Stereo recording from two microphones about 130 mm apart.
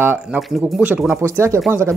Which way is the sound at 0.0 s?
15° right (ahead or behind).